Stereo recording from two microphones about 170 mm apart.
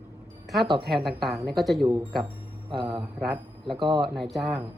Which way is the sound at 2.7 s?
30° right (ahead or behind).